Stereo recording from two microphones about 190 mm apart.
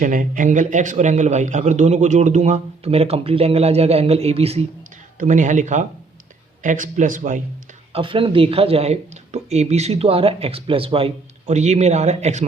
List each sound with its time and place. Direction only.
0.0 s speech: 45° right (ahead or behind)
7.9 s speech: 25° right (ahead or behind)